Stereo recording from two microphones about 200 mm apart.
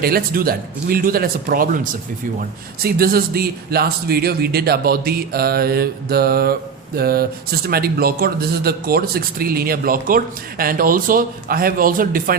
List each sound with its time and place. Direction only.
0.0 s speech: 50° right (ahead or behind)